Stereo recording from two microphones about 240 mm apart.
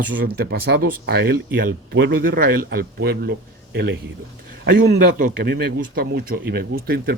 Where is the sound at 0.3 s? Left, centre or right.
Right.